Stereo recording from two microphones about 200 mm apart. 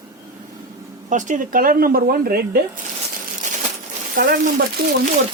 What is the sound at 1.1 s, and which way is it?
Speech, 40° right (ahead or behind).